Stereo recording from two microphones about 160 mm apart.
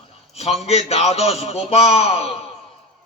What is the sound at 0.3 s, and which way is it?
A man's voice, 40° left (ahead or behind).